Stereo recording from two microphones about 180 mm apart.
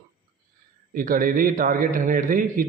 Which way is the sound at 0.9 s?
50° right (ahead or behind).